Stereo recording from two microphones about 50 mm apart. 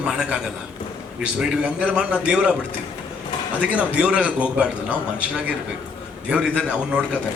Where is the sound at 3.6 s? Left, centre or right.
Right.